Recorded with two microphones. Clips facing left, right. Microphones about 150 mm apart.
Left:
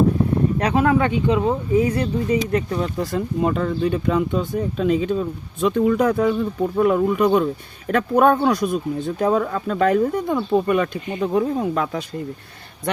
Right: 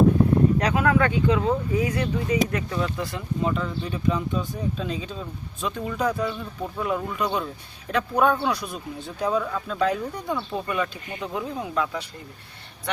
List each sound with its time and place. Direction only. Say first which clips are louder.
0.6 s speech: left 3 dB; 30° left (ahead or behind); by 12.0 s 50° left (ahead or behind)